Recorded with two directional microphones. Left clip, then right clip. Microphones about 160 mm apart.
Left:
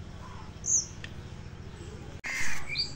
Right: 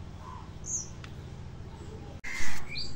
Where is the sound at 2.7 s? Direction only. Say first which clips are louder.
Left 8 dB; 20° left (ahead or behind).